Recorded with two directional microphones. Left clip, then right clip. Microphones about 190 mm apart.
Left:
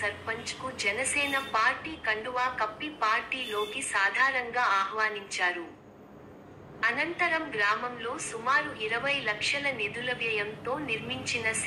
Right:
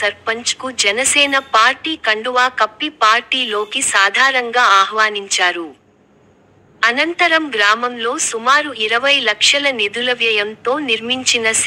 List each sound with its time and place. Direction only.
0.0 s a woman's voice: 65° right (ahead or behind)
6.8 s a woman's voice: 65° right (ahead or behind)